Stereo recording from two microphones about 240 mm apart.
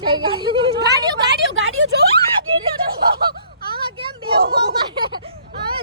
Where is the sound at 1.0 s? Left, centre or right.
Right.